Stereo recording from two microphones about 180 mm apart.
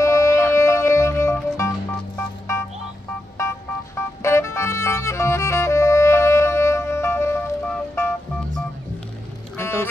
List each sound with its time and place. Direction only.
0.0 s music: 15° left (ahead or behind)
3.3 s music: 15° left (ahead or behind)
9.6 s music: 15° left (ahead or behind)